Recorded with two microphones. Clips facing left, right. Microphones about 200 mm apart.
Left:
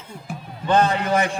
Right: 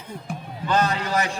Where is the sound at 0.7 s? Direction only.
30° left (ahead or behind).